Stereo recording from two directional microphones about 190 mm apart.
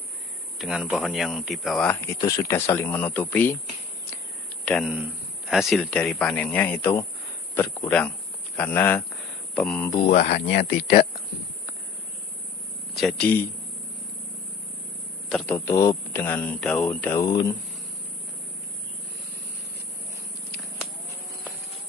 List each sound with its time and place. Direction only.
0.6 s a man's voice: 5° right (ahead or behind)
4.6 s a man's voice: centre (ahead or behind)
10.1 s speech: 50° left (ahead or behind)
13.0 s speech: 10° left (ahead or behind)
15.2 s speech: 5° left (ahead or behind)